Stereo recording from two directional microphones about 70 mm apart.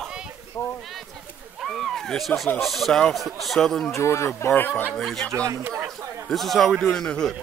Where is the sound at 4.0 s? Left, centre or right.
Left.